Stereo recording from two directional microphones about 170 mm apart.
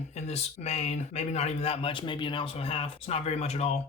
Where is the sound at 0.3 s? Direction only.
35° left (ahead or behind).